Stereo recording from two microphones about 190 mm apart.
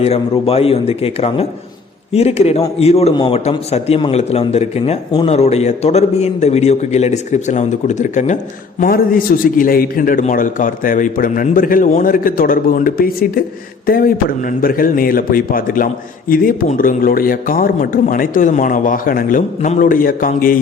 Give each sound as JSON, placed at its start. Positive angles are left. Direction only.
{"t": 0.0, "sound": "a man's voice", "side_deg": 30}